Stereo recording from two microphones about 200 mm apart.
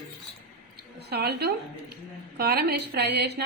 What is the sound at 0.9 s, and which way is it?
A woman's voice, 55° right (ahead or behind).